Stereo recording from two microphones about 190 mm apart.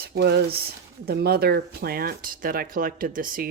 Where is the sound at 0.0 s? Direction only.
55° right (ahead or behind).